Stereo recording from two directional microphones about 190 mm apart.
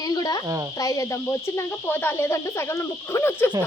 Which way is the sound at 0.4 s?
15° right (ahead or behind).